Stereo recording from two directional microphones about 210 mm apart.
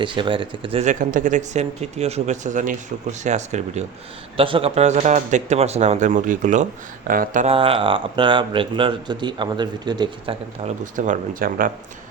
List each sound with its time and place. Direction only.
0.0 s speech: 25° right (ahead or behind); by 11.7 s 40° right (ahead or behind)